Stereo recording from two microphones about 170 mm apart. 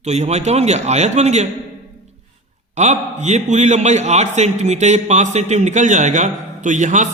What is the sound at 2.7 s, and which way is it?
A man's voice, 40° right (ahead or behind).